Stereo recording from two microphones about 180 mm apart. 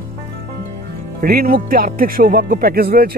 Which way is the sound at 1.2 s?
55° right (ahead or behind).